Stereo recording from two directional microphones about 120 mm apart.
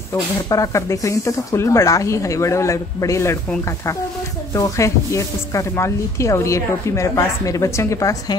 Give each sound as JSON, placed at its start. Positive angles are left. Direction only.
{"t": 0.1, "sound": "speech", "side_deg": 25}
{"t": 4.6, "sound": "speech", "side_deg": 25}